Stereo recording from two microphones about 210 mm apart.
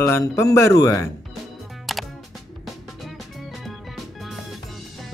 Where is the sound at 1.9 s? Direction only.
Centre (ahead or behind).